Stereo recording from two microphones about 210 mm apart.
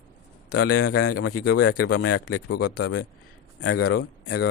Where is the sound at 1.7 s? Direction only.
90° left; by 2.9 s 60° left (ahead or behind).